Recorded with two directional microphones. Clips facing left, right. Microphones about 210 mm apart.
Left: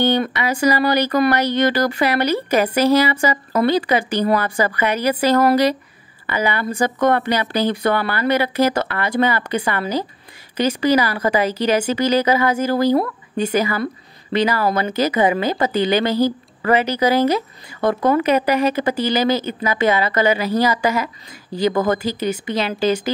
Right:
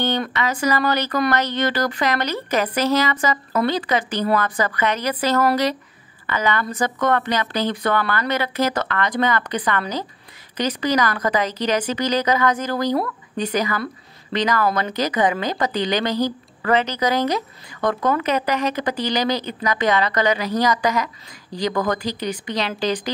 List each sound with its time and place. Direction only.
0.0 s speech: 10° left (ahead or behind)